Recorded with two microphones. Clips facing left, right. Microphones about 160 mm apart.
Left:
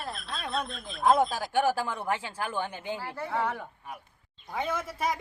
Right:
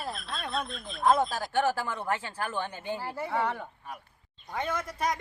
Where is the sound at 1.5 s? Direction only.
15° left (ahead or behind).